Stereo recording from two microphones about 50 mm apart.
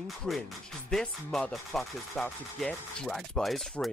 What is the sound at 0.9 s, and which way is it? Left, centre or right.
Rub, centre.